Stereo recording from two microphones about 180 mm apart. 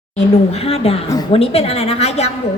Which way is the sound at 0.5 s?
35° left (ahead or behind).